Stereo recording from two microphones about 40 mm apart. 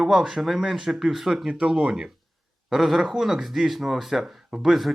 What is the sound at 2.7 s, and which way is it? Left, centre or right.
Speech, centre.